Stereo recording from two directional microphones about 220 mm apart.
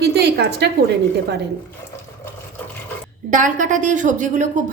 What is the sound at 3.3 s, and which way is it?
A woman's voice, 35° right (ahead or behind).